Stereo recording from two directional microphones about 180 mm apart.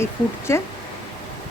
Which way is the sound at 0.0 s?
15° left (ahead or behind).